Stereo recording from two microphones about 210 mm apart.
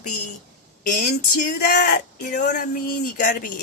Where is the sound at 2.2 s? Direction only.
35° left (ahead or behind).